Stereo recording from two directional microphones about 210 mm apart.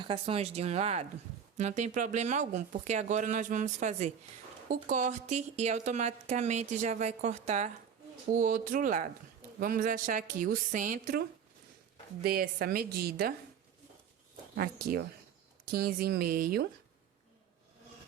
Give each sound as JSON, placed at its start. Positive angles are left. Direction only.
{"t": 0.0, "sound": "speech", "side_deg": -25}
{"t": 12.2, "sound": "a woman's voice", "side_deg": -45}
{"t": 14.5, "sound": "a woman's voice", "side_deg": -50}